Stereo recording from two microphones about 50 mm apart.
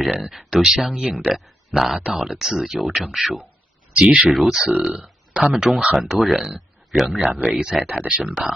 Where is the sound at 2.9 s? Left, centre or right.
Right.